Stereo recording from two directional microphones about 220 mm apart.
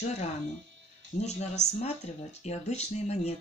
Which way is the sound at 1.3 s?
30° left (ahead or behind).